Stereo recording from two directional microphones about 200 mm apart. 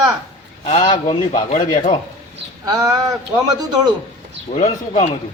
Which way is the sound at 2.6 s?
15° right (ahead or behind).